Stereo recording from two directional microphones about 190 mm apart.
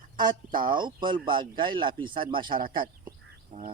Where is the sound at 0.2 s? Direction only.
25° right (ahead or behind).